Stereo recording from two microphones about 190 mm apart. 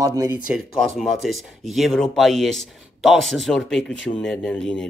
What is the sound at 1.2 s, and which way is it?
Speech, centre (ahead or behind).